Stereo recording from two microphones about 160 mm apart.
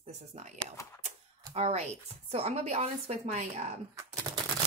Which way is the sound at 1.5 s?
40° right (ahead or behind).